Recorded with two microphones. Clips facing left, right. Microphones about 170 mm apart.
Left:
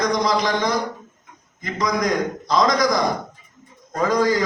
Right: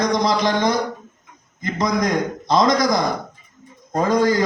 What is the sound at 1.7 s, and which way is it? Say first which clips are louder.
Speech: right 1 dB; 25° right (ahead or behind).